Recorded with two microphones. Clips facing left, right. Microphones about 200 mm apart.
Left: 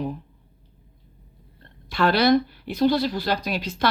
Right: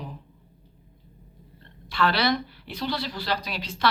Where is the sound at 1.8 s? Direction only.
45° left (ahead or behind).